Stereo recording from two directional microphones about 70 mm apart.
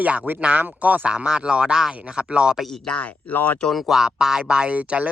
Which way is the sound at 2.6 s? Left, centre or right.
Centre.